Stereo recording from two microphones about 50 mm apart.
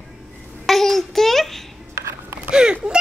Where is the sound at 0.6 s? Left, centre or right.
Centre.